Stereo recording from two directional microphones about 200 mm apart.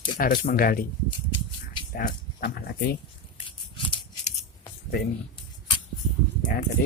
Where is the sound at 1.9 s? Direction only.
50° left (ahead or behind).